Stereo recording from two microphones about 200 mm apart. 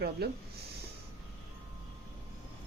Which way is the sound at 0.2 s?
55° right (ahead or behind).